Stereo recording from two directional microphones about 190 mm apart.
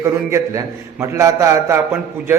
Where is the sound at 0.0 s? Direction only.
15° right (ahead or behind).